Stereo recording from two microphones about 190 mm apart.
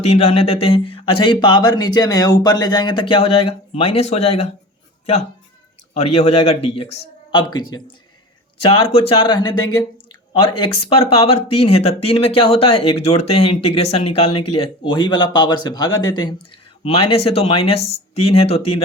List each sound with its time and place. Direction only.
0.0 s speech: 35° left (ahead or behind)
5.9 s speech: 35° left (ahead or behind)